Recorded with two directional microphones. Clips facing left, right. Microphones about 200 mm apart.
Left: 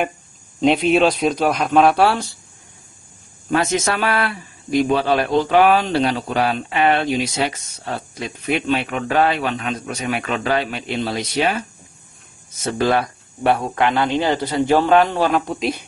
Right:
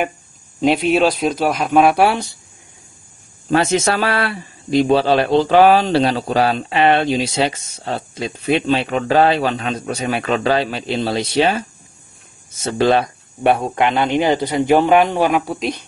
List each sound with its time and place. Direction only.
0.6 s a man's voice: centre (ahead or behind)
3.4 s a man's voice: 30° right (ahead or behind)
12.6 s speech: 25° right (ahead or behind); by 15.7 s 5° right (ahead or behind)